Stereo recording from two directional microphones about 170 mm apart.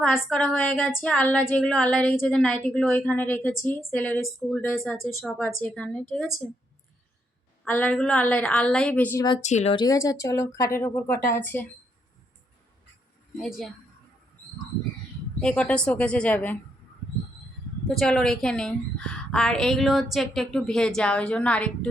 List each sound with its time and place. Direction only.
0.0 s a woman's voice: 5° left (ahead or behind)
7.6 s speech: 10° left (ahead or behind)
9.4 s speech: 45° left (ahead or behind)
9.7 s speech: 20° left (ahead or behind)
13.3 s a woman's voice: centre (ahead or behind)
15.4 s speech: 5° left (ahead or behind)
17.8 s a woman's voice: 5° left (ahead or behind)